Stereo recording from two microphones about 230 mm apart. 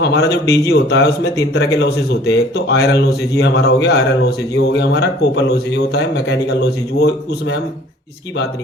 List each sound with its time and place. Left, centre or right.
0.0 s a man's voice: left